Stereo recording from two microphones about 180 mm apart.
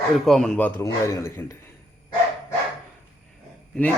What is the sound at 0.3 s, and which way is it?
A man's voice, 5° left (ahead or behind).